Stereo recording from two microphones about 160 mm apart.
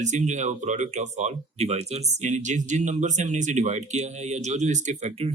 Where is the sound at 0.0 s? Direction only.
50° right (ahead or behind).